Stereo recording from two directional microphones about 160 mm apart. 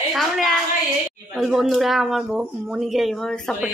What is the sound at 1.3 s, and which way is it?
Speech, centre (ahead or behind).